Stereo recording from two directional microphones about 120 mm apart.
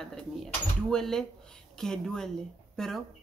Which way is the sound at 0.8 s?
5° left (ahead or behind).